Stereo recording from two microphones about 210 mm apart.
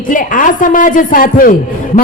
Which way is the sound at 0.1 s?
40° left (ahead or behind).